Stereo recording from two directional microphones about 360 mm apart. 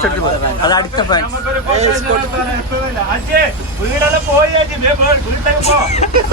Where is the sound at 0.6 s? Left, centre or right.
Centre.